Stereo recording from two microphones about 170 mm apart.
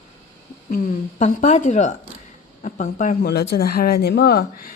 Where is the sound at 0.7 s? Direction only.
50° left (ahead or behind).